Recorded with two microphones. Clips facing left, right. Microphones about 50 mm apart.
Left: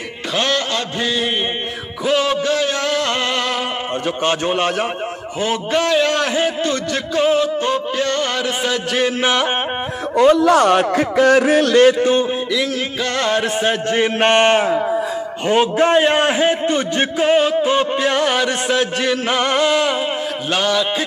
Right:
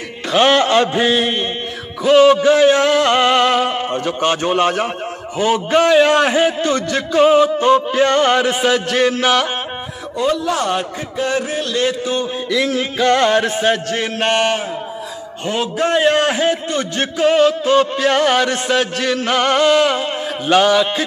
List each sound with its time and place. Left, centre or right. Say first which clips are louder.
0.4 s mantra: right 8 dB; right
2.0 s music: right 7 dB; centre
2.4 s a sound: right 7 dB; centre
6.4 s music: right 3 dB; centre
8.0 s a sound: right 6 dB; centre
8.6 s music: right 4 dB; centre
10.2 s a man's voice: left 6 dB; left
12.4 s music: right 2 dB; centre
13.4 s music: right 2 dB; centre
13.8 s a man's voice: left 4 dB; centre
14.2 s a sound: left 3 dB; left
15.4 s a man's voice: left 4 dB; left; by 18.1 s centre
18.1 s music: right 2 dB; centre